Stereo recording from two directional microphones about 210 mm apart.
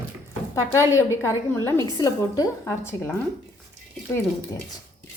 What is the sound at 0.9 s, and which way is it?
A woman's voice, 15° left (ahead or behind).